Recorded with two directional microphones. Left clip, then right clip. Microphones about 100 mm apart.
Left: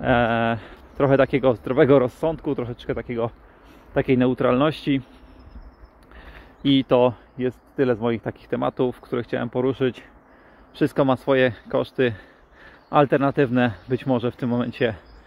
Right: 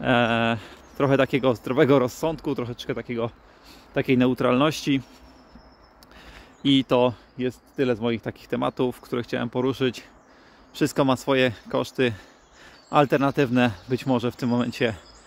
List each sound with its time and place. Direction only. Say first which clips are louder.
0.0 s speech: left 1 dB; 35° right (ahead or behind)
6.1 s a sound: left 2 dB; 25° right (ahead or behind)
7.4 s speech: left 3 dB; 20° right (ahead or behind)